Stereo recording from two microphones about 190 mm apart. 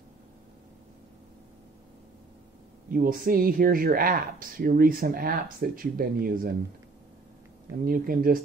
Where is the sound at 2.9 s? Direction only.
50° right (ahead or behind).